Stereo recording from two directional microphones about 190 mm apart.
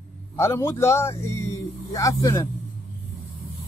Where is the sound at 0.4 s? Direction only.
15° left (ahead or behind).